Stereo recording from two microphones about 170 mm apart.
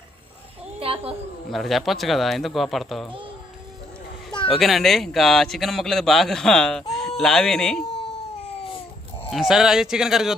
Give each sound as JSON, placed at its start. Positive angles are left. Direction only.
{"t": 0.8, "sound": "a sound", "side_deg": -35}
{"t": 1.5, "sound": "a man's voice", "side_deg": 0}
{"t": 4.4, "sound": "a man's voice", "side_deg": 0}
{"t": 9.3, "sound": "a man's voice", "side_deg": -5}